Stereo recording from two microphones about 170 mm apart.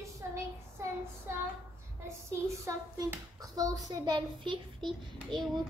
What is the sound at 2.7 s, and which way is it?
A child's voice, 20° right (ahead or behind).